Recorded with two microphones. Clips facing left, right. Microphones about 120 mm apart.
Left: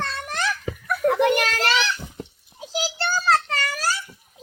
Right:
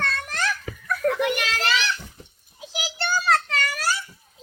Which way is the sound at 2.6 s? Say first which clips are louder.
Left 4 dB; 35° left (ahead or behind).